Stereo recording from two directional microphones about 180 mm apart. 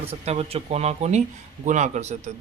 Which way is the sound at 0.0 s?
35° right (ahead or behind).